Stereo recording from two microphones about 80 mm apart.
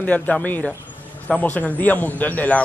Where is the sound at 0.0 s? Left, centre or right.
Centre.